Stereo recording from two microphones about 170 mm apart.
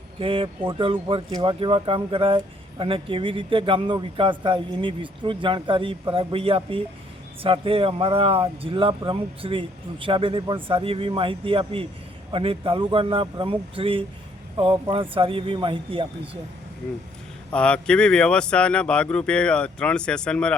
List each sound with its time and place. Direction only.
0.2 s speech: 30° right (ahead or behind)
17.5 s speech: 5° left (ahead or behind)